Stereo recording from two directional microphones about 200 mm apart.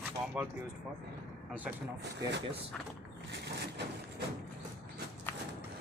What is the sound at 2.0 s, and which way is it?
Speech, 60° right (ahead or behind).